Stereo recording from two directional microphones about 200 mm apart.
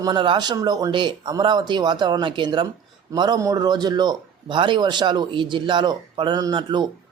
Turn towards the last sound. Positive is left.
turn(degrees=-20)  # may be behind; listen again after turning